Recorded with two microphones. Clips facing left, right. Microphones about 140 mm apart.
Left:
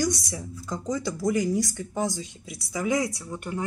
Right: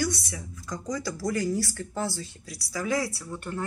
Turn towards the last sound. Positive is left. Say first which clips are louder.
# left 2 dB
turn(degrees=15)  # may be behind; listen again after turning